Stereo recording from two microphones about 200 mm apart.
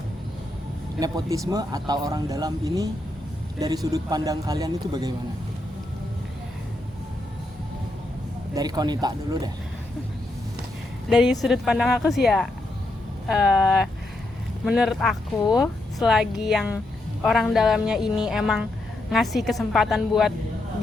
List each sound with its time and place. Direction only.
0.9 s a man's voice: 20° right (ahead or behind)
8.5 s speech: 20° right (ahead or behind)
11.1 s speech: centre (ahead or behind)